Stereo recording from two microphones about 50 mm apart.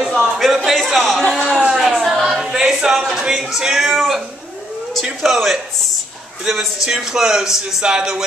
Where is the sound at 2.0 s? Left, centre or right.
Centre.